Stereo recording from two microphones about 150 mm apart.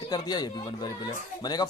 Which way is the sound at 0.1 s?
25° left (ahead or behind).